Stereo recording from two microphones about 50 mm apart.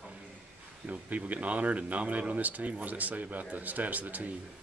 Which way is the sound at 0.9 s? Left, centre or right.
Right.